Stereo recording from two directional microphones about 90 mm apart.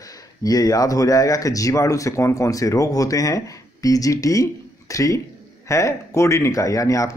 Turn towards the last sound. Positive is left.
turn(degrees=35)  # may be behind; listen again after turning